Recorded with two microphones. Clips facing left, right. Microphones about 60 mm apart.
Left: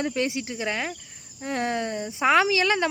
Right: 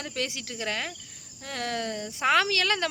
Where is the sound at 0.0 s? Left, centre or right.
Left.